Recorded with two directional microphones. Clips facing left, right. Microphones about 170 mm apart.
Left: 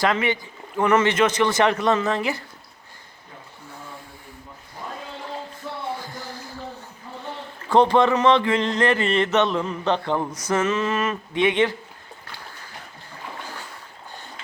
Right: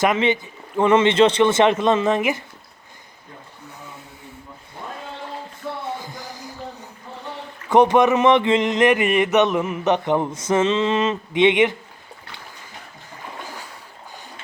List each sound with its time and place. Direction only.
0.0 s speech: 20° right (ahead or behind)
6.0 s a sound: 15° right (ahead or behind)
7.7 s speech: 20° right (ahead or behind)